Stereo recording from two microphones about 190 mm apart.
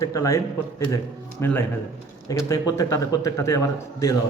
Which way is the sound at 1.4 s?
10° left (ahead or behind).